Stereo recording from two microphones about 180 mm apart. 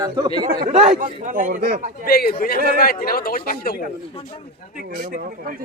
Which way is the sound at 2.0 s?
55° left (ahead or behind).